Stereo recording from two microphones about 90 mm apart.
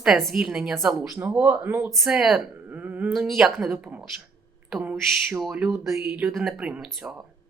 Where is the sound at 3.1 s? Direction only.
5° right (ahead or behind).